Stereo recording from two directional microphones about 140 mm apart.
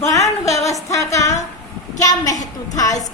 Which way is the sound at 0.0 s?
20° left (ahead or behind).